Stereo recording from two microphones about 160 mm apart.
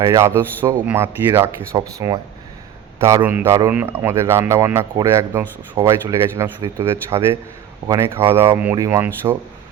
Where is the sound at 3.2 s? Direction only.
15° right (ahead or behind).